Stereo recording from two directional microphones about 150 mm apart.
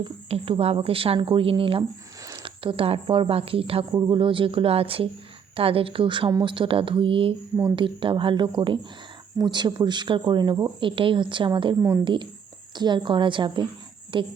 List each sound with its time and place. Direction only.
0.0 s a woman's voice: 40° right (ahead or behind)
11.8 s a woman's voice: 20° right (ahead or behind)
12.0 s a woman's voice: 35° right (ahead or behind)